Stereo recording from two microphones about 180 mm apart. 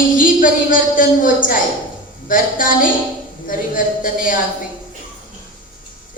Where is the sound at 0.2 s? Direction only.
50° left (ahead or behind).